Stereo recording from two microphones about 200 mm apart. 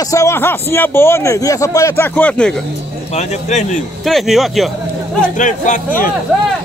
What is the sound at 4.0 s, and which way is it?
Speech, centre (ahead or behind).